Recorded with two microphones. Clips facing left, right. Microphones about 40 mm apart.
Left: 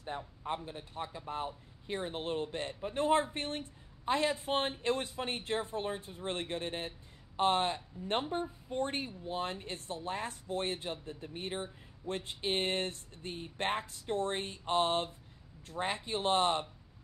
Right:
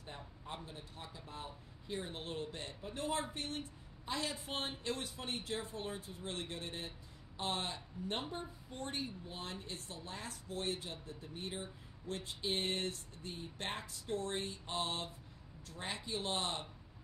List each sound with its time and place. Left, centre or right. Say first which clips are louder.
0.0 s speech: left 10 dB; left